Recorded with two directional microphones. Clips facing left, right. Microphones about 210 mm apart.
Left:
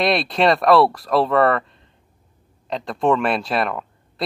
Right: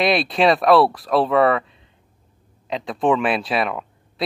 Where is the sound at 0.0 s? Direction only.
Centre (ahead or behind).